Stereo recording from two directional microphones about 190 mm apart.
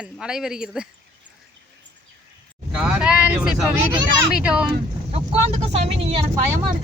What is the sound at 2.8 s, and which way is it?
Vehicle, 5° right (ahead or behind).